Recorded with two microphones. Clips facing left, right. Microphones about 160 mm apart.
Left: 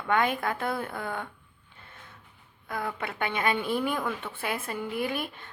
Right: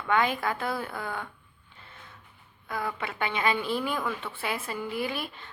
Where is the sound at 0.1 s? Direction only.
50° left (ahead or behind).